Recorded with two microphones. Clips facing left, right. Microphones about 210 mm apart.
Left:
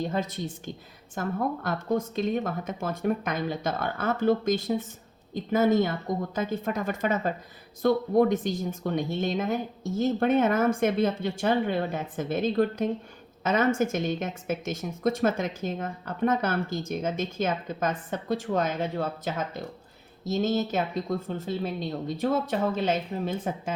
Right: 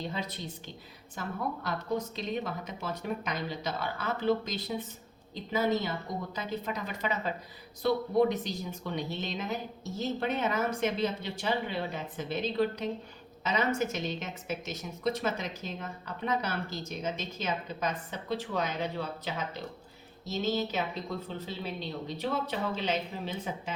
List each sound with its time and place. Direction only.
0.0 s a woman's voice: 50° left (ahead or behind)